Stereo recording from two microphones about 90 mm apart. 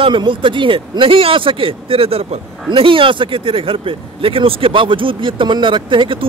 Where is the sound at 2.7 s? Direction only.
75° right (ahead or behind).